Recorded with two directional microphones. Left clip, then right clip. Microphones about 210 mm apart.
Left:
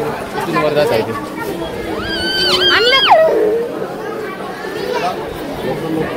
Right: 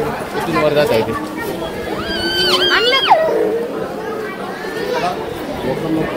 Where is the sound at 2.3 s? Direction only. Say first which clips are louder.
Left 1 dB; 20° left (ahead or behind).